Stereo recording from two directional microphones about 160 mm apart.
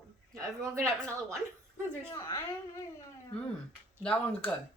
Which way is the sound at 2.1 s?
25° left (ahead or behind).